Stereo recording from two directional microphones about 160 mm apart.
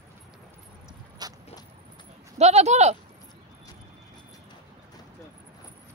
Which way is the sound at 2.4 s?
45° right (ahead or behind).